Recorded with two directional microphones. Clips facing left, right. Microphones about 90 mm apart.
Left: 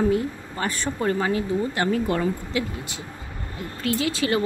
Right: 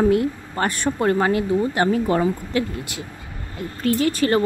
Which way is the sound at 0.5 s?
55° right (ahead or behind).